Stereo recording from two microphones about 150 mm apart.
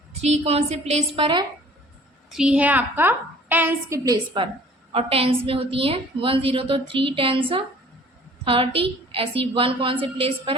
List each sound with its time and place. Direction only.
0.2 s a woman's voice: 45° right (ahead or behind)
2.3 s a woman's voice: 5° right (ahead or behind)
4.9 s a woman's voice: 40° right (ahead or behind)